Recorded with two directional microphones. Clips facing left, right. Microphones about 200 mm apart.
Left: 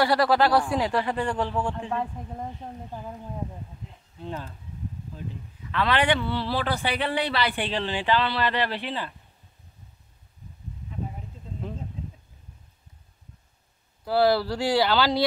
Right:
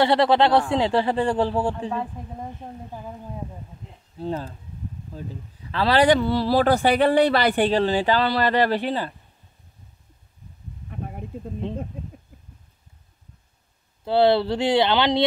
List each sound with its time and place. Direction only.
0.0 s speech: 25° right (ahead or behind)
2.2 s a woman's voice: centre (ahead or behind)
4.2 s speech: 35° right (ahead or behind)
14.0 s speech: 25° right (ahead or behind)